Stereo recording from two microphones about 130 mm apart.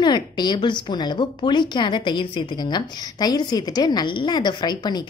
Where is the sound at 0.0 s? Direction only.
35° left (ahead or behind).